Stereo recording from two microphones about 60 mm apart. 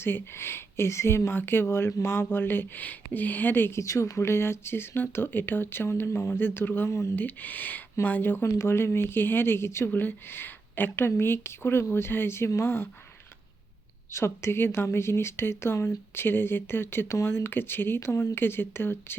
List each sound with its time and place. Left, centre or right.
0.0 s speech: left
3.8 s speech: left
8.4 s speech: left
9.9 s speech: left
14.1 s speech: left